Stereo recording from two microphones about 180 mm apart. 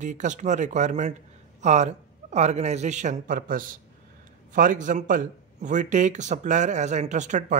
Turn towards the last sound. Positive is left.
turn(degrees=-40)  # may be behind; listen again after turning